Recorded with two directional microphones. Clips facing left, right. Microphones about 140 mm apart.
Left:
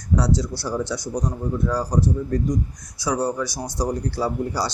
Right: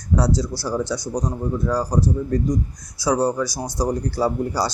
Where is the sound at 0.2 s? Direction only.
40° right (ahead or behind).